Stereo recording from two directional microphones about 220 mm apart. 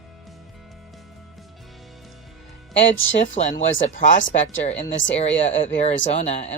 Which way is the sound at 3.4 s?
30° left (ahead or behind).